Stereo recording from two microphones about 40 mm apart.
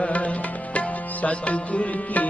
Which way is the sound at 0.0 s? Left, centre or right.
Left.